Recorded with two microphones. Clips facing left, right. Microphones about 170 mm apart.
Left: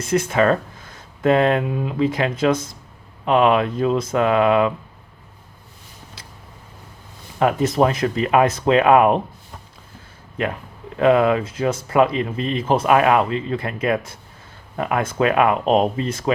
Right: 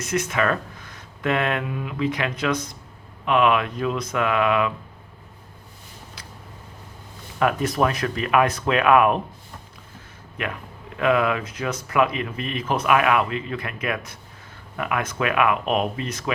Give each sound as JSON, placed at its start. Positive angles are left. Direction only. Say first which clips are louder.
{"t": 0.0, "sound": "speech", "louder": "left 5 dB", "side_deg": 30}
{"t": 7.3, "sound": "speech", "louder": "left 4 dB", "side_deg": 25}
{"t": 10.9, "sound": "speech", "louder": "left 5 dB", "side_deg": 35}